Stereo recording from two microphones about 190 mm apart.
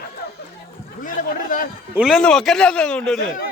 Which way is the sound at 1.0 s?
45° left (ahead or behind).